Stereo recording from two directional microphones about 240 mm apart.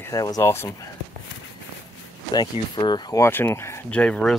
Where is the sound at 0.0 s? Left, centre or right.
Centre.